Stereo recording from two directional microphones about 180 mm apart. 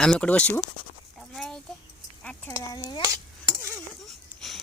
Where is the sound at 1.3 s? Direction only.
Centre (ahead or behind).